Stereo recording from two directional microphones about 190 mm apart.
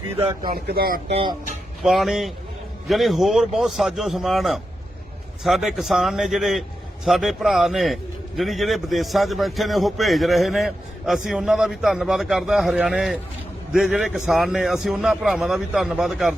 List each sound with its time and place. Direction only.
0.4 s a man's voice: 50° right (ahead or behind)
1.0 s speech: 30° right (ahead or behind)
1.8 s a man's voice: centre (ahead or behind)